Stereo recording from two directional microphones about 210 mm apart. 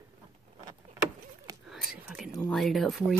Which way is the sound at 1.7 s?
5° right (ahead or behind).